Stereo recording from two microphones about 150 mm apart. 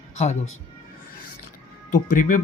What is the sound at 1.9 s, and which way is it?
Speech, 65° left (ahead or behind).